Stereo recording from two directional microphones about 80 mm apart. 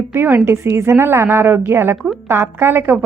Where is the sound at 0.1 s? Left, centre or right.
Right.